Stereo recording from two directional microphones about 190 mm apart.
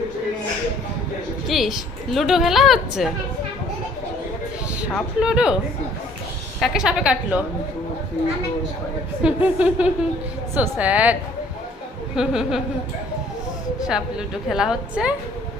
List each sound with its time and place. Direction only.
1.5 s a woman's voice: centre (ahead or behind)
4.9 s a woman's voice: centre (ahead or behind)
6.6 s a woman's voice: 5° right (ahead or behind)
9.2 s a woman's voice: 5° right (ahead or behind)
13.8 s a woman's voice: 5° right (ahead or behind)